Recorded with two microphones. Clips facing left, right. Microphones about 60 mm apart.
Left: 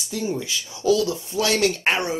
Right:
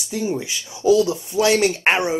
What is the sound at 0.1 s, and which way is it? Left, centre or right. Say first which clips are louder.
Speech: right 2 dB; right.